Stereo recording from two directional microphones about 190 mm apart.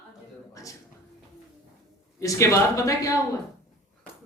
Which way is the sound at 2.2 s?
15° left (ahead or behind).